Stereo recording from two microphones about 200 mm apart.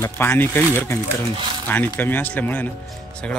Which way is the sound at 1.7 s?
10° left (ahead or behind).